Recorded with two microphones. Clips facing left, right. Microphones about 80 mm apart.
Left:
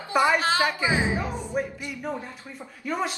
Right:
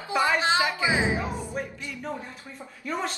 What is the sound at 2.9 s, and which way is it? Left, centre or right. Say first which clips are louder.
Speech: left 2 dB; centre.